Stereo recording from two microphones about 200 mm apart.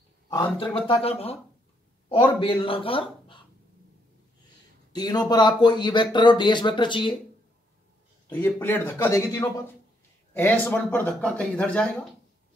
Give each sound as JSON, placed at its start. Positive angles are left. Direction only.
{"t": 0.3, "sound": "speech", "side_deg": 25}
{"t": 2.4, "sound": "speech", "side_deg": 25}
{"t": 4.9, "sound": "speech", "side_deg": 20}
{"t": 8.3, "sound": "speech", "side_deg": 10}